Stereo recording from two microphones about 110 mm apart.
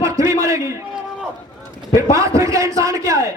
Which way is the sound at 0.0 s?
30° right (ahead or behind).